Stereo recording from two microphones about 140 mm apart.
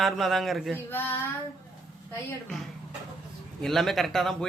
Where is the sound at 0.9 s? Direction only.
15° left (ahead or behind).